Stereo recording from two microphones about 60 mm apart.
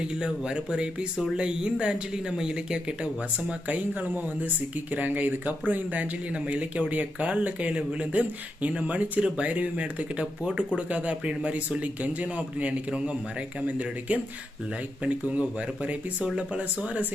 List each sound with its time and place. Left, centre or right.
0.0 s speech: centre